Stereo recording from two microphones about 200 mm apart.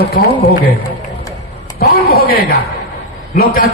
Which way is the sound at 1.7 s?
50° left (ahead or behind).